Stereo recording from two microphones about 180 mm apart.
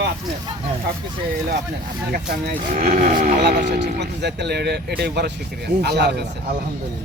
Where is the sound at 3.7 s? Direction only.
70° right (ahead or behind).